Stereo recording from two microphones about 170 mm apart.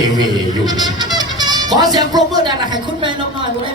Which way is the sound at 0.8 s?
25° right (ahead or behind).